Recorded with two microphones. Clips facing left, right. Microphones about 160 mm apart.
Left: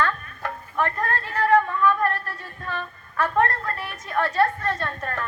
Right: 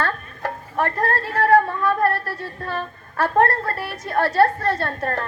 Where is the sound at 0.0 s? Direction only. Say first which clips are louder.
Right 1 dB; 40° right (ahead or behind).